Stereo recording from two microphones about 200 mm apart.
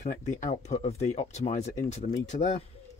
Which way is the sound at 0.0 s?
35° left (ahead or behind).